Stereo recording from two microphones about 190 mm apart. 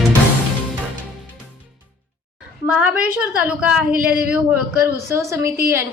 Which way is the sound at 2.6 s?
10° right (ahead or behind).